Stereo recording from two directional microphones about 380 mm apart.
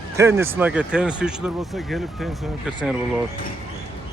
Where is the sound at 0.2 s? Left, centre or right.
Centre.